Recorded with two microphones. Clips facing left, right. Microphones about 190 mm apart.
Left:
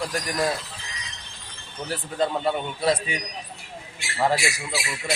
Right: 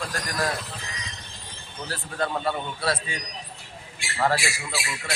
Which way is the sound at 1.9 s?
15° left (ahead or behind).